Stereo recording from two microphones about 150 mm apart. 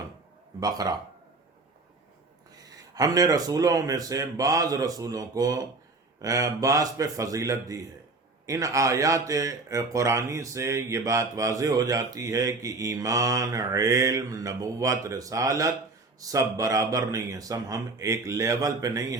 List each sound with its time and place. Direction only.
0.6 s speech: 25° right (ahead or behind)
2.9 s speech: 25° right (ahead or behind)